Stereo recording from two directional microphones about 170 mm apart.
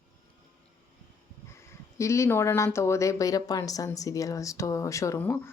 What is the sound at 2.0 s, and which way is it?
Speech, 15° left (ahead or behind).